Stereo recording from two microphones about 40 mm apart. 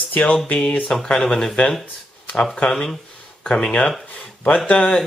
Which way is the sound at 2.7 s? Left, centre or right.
Centre.